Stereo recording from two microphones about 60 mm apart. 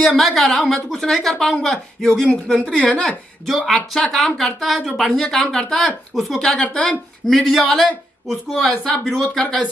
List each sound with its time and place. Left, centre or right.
0.0 s a woman's voice: centre
3.4 s a woman's voice: centre
6.6 s speech: centre
7.2 s a woman's voice: centre